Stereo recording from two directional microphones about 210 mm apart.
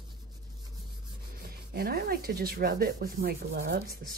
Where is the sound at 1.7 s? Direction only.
45° right (ahead or behind).